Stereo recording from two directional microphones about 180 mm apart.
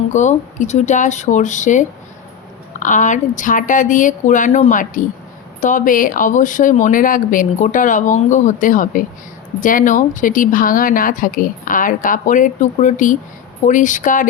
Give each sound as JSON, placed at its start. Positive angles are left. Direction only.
{"t": 0.1, "sound": "speech", "side_deg": 40}